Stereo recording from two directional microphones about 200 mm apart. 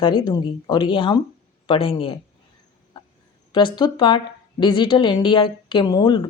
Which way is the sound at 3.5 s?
25° left (ahead or behind).